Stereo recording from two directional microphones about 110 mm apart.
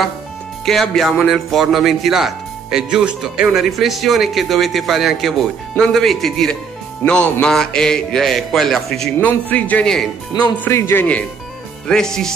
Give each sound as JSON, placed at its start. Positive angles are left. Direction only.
{"t": 0.7, "sound": "speech", "side_deg": 0}
{"t": 9.2, "sound": "speech", "side_deg": 15}
{"t": 10.6, "sound": "speech", "side_deg": 25}
{"t": 11.9, "sound": "speech", "side_deg": 5}